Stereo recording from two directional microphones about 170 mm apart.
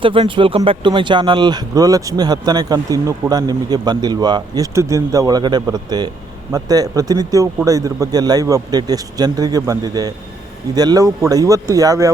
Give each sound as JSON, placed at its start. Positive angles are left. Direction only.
{"t": 0.0, "sound": "speech", "side_deg": -30}